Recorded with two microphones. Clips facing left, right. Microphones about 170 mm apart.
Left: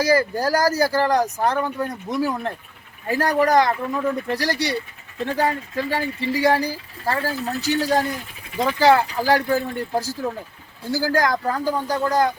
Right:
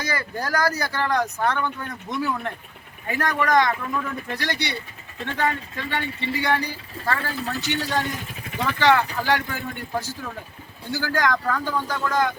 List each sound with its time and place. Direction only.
0.0 s speech: 35° left (ahead or behind)